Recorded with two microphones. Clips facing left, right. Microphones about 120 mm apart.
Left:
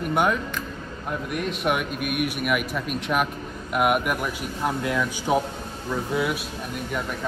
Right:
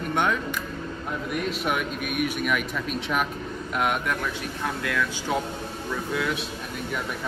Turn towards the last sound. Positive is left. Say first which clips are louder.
# left 2 dB
turn(degrees=15)  # may be behind; listen again after turning